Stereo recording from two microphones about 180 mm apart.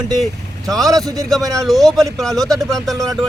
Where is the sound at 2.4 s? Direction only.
20° right (ahead or behind).